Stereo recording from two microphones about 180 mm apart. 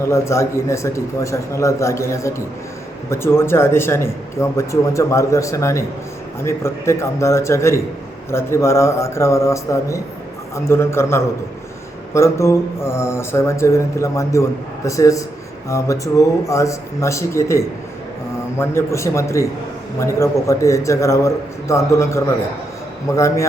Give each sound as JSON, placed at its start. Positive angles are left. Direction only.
{"t": 0.0, "sound": "speech", "side_deg": 15}